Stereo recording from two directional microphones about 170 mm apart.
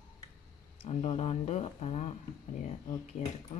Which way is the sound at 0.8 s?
35° left (ahead or behind).